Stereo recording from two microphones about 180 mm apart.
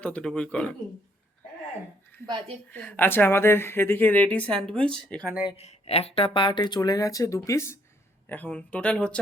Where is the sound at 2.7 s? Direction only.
10° left (ahead or behind).